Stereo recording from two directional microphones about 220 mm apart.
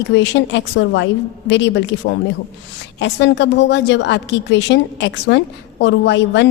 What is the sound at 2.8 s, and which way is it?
A woman's voice, 55° left (ahead or behind).